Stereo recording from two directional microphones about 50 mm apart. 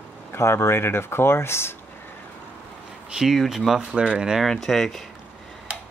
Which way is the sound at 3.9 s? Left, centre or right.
Centre.